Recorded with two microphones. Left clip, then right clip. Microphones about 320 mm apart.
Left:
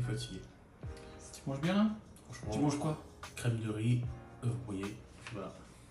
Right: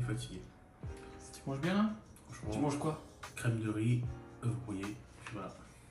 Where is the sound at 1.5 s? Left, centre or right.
Centre.